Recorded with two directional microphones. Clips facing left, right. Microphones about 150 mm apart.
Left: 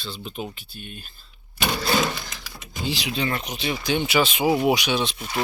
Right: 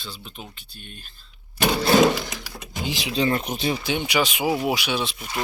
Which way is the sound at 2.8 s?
20° right (ahead or behind).